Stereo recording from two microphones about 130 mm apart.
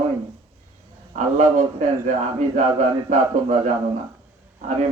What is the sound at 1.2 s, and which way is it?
A man's voice, 70° right (ahead or behind).